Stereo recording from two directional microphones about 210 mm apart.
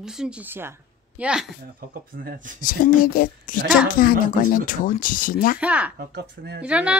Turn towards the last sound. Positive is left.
turn(degrees=-5)  # may be behind; listen again after turning